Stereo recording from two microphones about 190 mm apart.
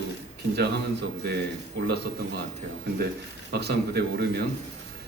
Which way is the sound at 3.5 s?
60° right (ahead or behind).